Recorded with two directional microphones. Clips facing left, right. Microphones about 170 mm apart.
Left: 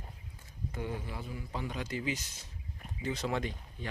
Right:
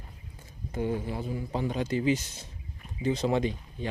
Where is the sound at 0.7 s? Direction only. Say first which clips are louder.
Right 9 dB; 30° right (ahead or behind).